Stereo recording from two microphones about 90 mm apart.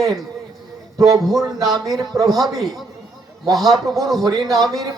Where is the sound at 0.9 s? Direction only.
40° right (ahead or behind).